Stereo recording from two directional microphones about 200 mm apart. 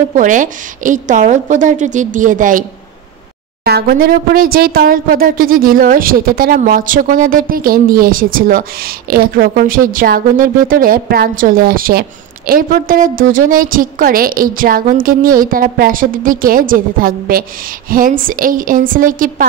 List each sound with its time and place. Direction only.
0.1 s a woman's voice: 40° right (ahead or behind)
3.6 s speech: 50° right (ahead or behind)